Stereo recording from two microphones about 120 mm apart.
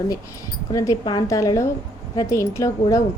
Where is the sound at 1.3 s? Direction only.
25° left (ahead or behind).